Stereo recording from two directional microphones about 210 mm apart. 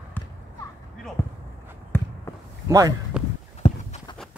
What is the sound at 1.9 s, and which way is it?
Basketball bounce, 10° left (ahead or behind).